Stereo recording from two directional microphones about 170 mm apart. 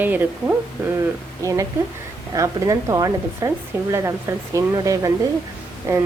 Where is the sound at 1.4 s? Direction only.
20° right (ahead or behind).